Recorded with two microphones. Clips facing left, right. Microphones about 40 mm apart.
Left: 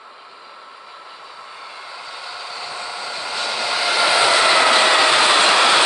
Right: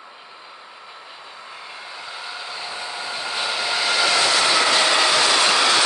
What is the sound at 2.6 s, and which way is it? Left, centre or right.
Train, centre.